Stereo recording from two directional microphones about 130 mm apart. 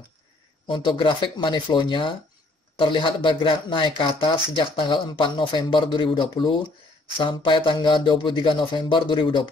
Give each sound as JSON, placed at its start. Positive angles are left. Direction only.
{"t": 0.7, "sound": "speech", "side_deg": 40}